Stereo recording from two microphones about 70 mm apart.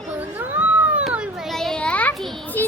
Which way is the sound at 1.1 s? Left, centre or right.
Centre.